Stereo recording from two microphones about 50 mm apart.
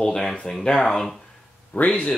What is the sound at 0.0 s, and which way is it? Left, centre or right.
Speech, centre.